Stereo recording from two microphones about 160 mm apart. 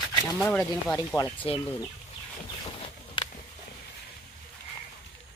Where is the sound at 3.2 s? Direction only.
30° left (ahead or behind).